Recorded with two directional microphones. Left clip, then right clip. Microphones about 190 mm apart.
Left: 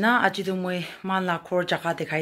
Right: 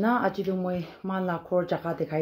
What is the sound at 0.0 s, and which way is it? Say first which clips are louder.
Speech: left 4 dB; 20° left (ahead or behind).